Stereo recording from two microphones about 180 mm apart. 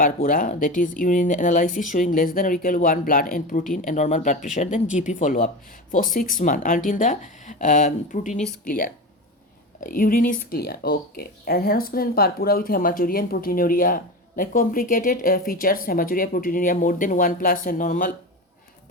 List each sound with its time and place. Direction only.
0.0 s speech: 50° left (ahead or behind)
9.8 s speech: 50° left (ahead or behind)